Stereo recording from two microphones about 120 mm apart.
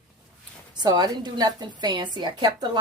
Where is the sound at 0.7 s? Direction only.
35° right (ahead or behind).